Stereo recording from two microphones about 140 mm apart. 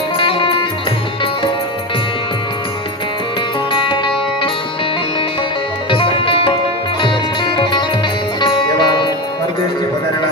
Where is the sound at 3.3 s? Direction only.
35° left (ahead or behind).